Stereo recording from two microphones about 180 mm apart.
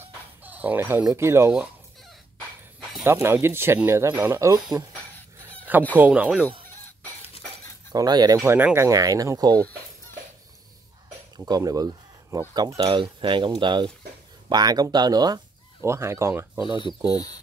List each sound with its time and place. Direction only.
0.0 s speech: 10° right (ahead or behind)
3.0 s speech: 15° right (ahead or behind)
5.9 s speech: 10° right (ahead or behind)
7.9 s speech: 20° right (ahead or behind)
11.3 s speech: 20° right (ahead or behind)
16.8 s speech: 20° left (ahead or behind)